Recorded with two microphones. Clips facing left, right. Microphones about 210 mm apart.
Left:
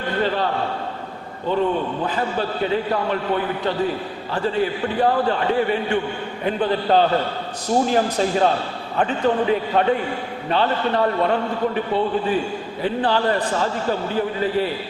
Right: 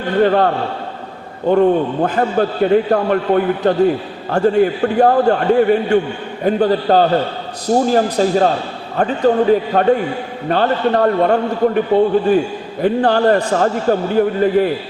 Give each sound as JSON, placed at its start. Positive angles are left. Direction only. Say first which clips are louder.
{"t": 0.2, "sound": "a man's voice", "louder": "right 9 dB", "side_deg": -55}